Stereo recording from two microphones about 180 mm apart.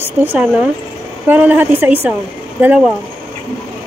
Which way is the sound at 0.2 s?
10° right (ahead or behind).